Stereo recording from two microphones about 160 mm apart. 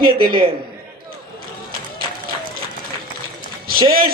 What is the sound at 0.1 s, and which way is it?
Speech, 65° right (ahead or behind).